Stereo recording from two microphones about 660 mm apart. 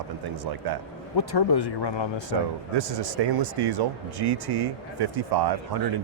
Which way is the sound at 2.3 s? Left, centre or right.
Right.